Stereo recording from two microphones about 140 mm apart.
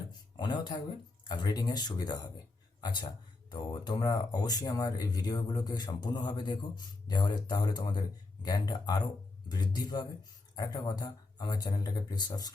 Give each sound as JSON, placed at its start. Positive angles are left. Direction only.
{"t": 0.3, "sound": "speech", "side_deg": 30}